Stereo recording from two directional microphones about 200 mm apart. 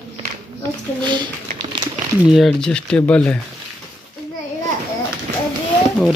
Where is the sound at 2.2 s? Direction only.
Centre (ahead or behind).